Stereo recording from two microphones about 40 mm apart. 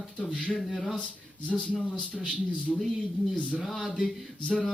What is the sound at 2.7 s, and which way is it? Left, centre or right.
Speech, centre.